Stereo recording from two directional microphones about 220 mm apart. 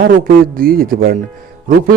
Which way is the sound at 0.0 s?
40° right (ahead or behind).